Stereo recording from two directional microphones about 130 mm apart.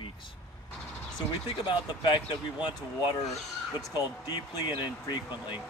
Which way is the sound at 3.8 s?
35° left (ahead or behind).